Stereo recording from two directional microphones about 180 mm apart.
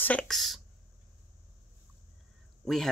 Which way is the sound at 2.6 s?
Centre (ahead or behind).